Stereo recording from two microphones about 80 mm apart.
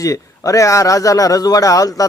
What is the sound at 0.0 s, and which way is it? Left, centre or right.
A man's voice, left.